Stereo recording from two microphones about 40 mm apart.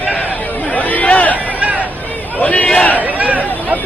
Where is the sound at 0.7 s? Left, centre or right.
Left.